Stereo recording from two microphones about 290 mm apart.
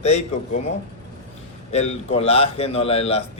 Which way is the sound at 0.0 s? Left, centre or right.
Left.